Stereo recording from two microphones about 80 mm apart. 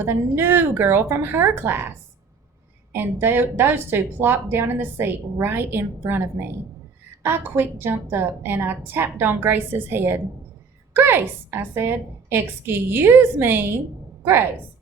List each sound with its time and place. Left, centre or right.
0.0 s speech: right
2.9 s speech: right